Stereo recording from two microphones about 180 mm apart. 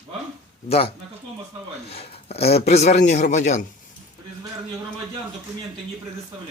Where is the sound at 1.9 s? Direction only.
35° left (ahead or behind).